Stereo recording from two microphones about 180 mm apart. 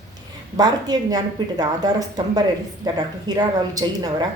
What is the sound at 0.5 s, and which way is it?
A woman's voice, 20° right (ahead or behind).